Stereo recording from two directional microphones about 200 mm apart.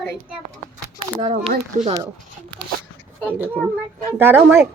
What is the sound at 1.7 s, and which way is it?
Speech, 40° right (ahead or behind).